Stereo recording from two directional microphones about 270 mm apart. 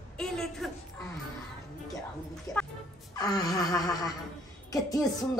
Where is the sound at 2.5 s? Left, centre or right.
Centre.